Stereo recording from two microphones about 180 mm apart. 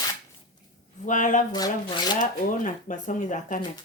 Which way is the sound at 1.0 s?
45° left (ahead or behind).